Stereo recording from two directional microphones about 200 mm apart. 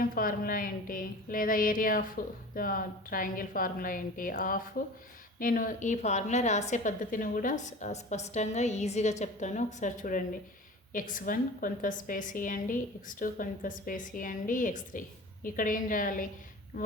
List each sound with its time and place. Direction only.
0.0 s a woman's voice: 45° left (ahead or behind)